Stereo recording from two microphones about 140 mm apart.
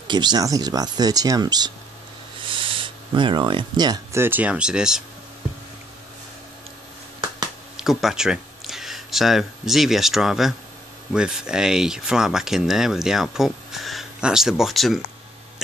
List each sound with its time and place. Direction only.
0.1 s speech: 30° right (ahead or behind); by 5.0 s 5° right (ahead or behind)
7.7 s speech: 5° right (ahead or behind)